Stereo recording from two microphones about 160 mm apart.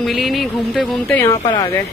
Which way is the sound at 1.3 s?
30° left (ahead or behind).